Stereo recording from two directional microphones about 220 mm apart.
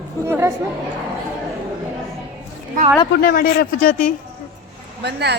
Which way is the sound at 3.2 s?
40° left (ahead or behind).